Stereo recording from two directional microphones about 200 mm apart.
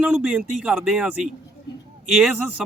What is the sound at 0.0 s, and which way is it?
Speech, 5° right (ahead or behind).